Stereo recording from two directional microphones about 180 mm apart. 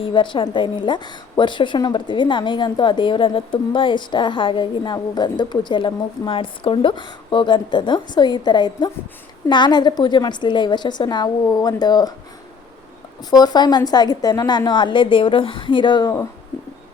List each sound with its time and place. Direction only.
0.0 s a woman's voice: 30° left (ahead or behind)
13.3 s a woman's voice: 20° left (ahead or behind)